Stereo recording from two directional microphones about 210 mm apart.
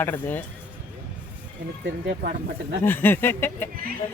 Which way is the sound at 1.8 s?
55° right (ahead or behind).